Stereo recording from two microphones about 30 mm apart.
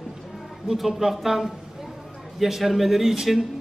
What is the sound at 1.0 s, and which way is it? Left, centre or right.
Speech, right.